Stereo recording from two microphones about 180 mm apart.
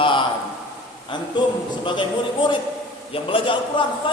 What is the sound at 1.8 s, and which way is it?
A man's voice, 25° left (ahead or behind).